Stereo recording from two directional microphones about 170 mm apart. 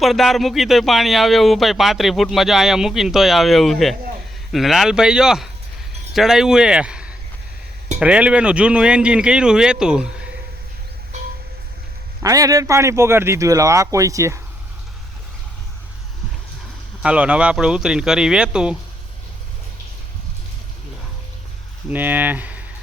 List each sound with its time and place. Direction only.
0.0 s speech: centre (ahead or behind)
12.2 s speech: 20° right (ahead or behind)
17.0 s speech: 5° right (ahead or behind)
21.8 s speech: 10° right (ahead or behind)